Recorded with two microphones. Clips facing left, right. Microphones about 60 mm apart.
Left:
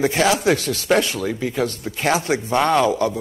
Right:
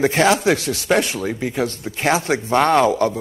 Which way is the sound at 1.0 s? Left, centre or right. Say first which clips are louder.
Even; right.